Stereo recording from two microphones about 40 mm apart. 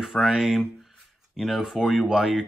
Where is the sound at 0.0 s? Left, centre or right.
Centre.